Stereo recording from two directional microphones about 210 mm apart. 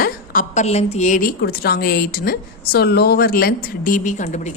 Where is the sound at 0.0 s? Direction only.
40° left (ahead or behind).